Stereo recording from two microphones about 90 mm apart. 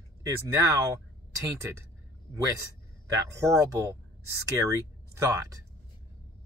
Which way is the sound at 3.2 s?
35° right (ahead or behind).